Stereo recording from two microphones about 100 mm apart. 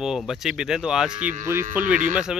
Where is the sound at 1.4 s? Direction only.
25° right (ahead or behind).